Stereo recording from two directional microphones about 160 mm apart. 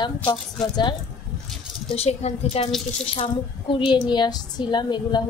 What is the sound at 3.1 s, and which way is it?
A woman's voice, 30° left (ahead or behind).